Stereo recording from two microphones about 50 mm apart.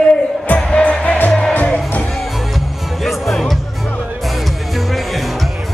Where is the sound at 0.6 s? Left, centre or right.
Centre.